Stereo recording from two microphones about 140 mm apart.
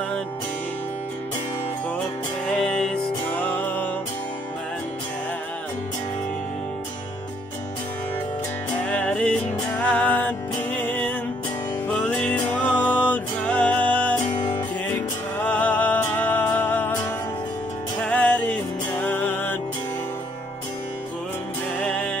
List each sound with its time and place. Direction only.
2.4 s music: 5° left (ahead or behind)
8.7 s music: 10° left (ahead or behind)
14.3 s music: 30° left (ahead or behind)
14.9 s music: 10° left (ahead or behind)
18.0 s music: 10° left (ahead or behind)
21.7 s music: 10° left (ahead or behind)